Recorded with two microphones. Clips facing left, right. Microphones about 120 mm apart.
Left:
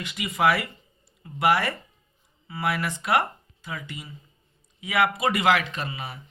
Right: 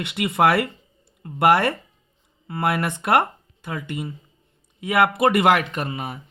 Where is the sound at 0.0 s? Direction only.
65° right (ahead or behind).